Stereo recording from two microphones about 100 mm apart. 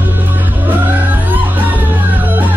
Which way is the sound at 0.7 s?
20° right (ahead or behind).